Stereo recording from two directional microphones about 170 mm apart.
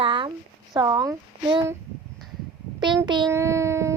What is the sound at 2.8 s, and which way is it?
Speech, 25° right (ahead or behind).